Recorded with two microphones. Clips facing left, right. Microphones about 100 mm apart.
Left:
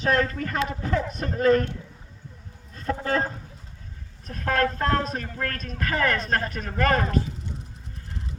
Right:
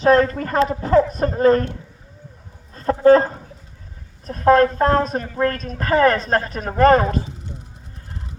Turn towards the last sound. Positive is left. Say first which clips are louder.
# right 10 dB
turn(degrees=-30)  # may be behind; listen again after turning